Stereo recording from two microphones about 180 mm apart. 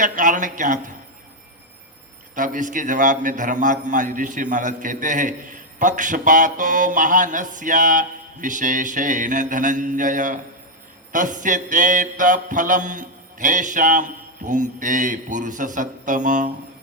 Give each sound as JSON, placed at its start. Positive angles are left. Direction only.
{"t": 0.0, "sound": "a man's voice", "side_deg": -45}
{"t": 2.3, "sound": "a man's voice", "side_deg": -45}